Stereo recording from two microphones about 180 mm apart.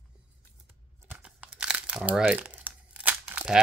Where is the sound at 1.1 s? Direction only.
5° right (ahead or behind).